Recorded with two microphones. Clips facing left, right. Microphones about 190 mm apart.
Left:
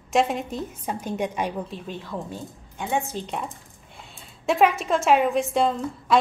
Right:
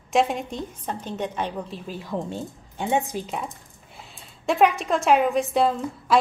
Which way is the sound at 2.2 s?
25° right (ahead or behind).